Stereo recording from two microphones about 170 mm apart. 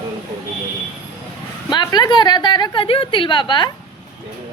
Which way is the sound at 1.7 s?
25° left (ahead or behind).